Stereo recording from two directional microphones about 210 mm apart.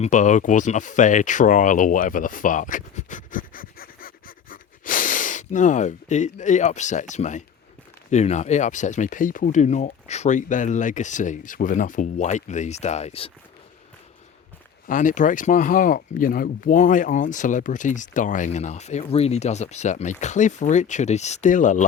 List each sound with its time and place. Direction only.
0.0 s speech: 35° left (ahead or behind)
14.8 s speech: 40° left (ahead or behind)